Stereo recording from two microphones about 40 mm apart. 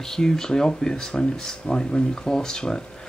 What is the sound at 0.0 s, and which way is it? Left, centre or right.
Speech, centre.